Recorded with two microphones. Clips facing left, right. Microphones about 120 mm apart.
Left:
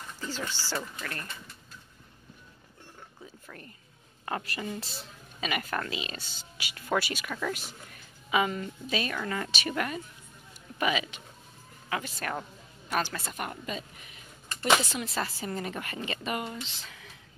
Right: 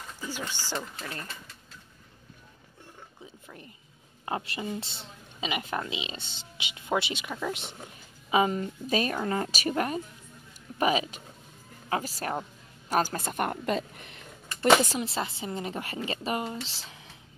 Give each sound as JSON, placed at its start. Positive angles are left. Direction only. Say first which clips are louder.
{"t": 0.2, "sound": "speech", "louder": "even", "side_deg": -15}
{"t": 3.4, "sound": "a woman's voice", "louder": "even", "side_deg": -15}
{"t": 8.8, "sound": "speech", "louder": "right 4 dB", "side_deg": -40}
{"t": 12.9, "sound": "speech", "louder": "right 4 dB", "side_deg": -45}
{"t": 15.0, "sound": "a woman's voice", "louder": "right 1 dB", "side_deg": -25}